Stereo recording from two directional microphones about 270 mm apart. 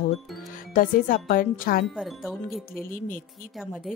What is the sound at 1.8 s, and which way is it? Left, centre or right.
Wind chime, centre.